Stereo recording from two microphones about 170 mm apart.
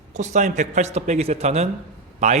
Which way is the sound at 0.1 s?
45° right (ahead or behind).